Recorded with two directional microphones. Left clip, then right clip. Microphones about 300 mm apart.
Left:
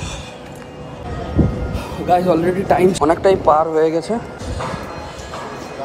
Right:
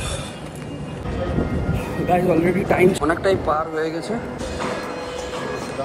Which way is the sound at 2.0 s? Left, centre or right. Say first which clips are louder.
Left 4 dB; centre.